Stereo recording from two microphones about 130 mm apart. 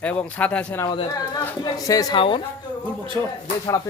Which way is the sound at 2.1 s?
40° left (ahead or behind).